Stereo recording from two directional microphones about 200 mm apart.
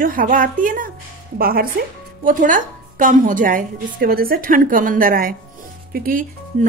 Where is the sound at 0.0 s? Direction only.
45° right (ahead or behind).